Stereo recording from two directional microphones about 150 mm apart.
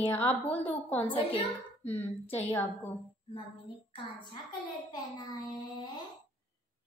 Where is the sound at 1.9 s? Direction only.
45° left (ahead or behind).